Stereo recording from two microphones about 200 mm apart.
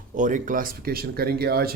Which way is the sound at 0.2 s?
40° right (ahead or behind).